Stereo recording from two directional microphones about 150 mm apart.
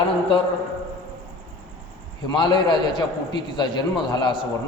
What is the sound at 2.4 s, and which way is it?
A man's voice, 30° left (ahead or behind).